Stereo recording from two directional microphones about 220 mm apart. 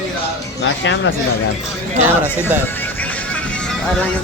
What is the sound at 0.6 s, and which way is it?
Speech, 60° left (ahead or behind).